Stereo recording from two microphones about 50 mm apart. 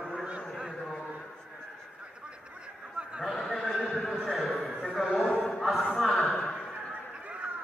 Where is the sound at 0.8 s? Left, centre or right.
Centre.